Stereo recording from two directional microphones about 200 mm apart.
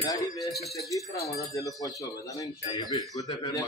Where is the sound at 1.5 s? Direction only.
15° left (ahead or behind).